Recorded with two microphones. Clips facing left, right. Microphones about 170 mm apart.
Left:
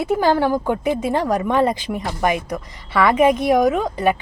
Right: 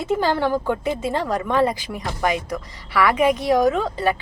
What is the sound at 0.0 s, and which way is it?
A woman's voice, 15° left (ahead or behind).